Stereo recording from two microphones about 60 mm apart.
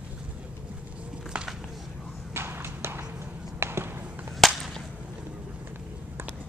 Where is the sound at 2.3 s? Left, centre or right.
Right.